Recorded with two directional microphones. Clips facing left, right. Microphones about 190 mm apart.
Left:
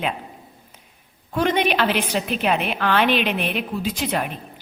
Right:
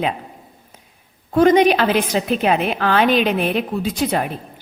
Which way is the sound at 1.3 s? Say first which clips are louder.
Right 8 dB; 45° right (ahead or behind).